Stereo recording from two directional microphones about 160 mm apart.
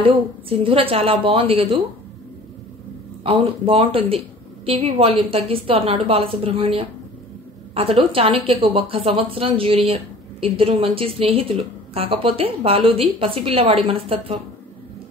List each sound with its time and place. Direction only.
0.0 s a woman's voice: 35° right (ahead or behind)
3.3 s a woman's voice: 35° right (ahead or behind)